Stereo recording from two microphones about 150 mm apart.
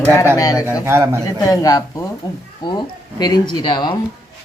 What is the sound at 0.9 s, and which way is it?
Speech, 15° right (ahead or behind).